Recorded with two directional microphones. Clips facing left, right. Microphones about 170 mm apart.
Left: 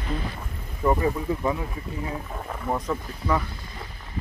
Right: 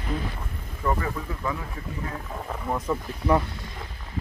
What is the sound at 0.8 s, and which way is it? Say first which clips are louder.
Speech: left 5 dB; 20° left (ahead or behind).